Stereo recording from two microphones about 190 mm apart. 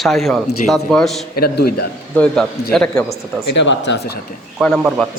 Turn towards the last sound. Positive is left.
turn(degrees=0)  # may be behind; listen again after turning